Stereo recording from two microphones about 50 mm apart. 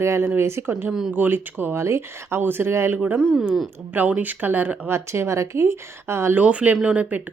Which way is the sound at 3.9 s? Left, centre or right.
Right.